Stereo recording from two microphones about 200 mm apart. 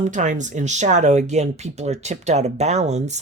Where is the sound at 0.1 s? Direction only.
40° right (ahead or behind).